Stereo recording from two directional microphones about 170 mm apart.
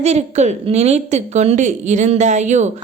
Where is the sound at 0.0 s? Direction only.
40° right (ahead or behind).